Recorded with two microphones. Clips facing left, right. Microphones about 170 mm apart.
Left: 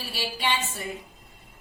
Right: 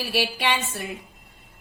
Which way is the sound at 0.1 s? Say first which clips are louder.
Right 4 dB; 70° right (ahead or behind).